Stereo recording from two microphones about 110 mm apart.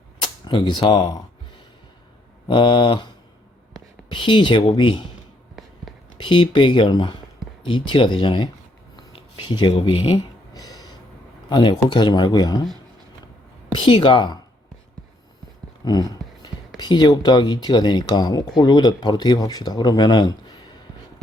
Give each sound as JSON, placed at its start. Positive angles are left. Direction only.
{"t": 0.2, "sound": "speech", "side_deg": 45}
{"t": 2.5, "sound": "speech", "side_deg": 45}
{"t": 4.1, "sound": "speech", "side_deg": 45}
{"t": 6.1, "sound": "speech", "side_deg": 45}
{"t": 10.5, "sound": "a sound", "side_deg": 35}
{"t": 11.4, "sound": "speech", "side_deg": 40}
{"t": 13.7, "sound": "speech", "side_deg": 50}
{"t": 15.8, "sound": "speech", "side_deg": 35}